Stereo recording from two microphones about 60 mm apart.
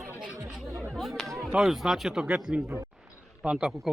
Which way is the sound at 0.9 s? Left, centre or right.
Centre.